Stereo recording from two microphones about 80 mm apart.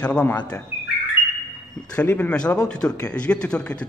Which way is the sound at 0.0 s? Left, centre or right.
Centre.